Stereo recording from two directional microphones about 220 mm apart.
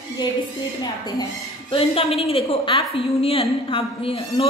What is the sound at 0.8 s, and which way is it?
A woman's voice, 15° left (ahead or behind).